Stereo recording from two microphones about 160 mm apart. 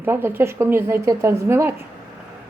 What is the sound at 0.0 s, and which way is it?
A woman's voice, 15° right (ahead or behind).